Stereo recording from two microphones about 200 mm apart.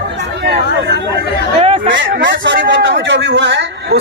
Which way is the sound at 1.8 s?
65° right (ahead or behind).